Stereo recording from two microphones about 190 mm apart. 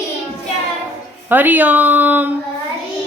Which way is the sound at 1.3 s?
10° right (ahead or behind).